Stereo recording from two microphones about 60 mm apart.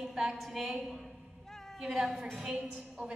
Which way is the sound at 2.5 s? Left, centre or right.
Centre.